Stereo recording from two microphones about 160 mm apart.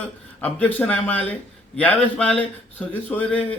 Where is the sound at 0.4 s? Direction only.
10° left (ahead or behind).